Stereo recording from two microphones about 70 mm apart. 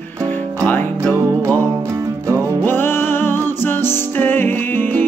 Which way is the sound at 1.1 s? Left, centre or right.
Right.